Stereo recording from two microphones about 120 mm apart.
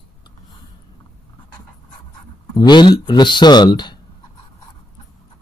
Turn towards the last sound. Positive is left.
turn(degrees=35)  # may be behind; listen again after turning